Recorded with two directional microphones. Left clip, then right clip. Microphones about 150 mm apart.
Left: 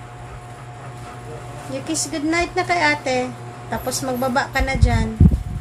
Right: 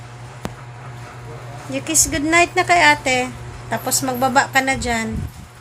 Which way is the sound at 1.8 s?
40° right (ahead or behind).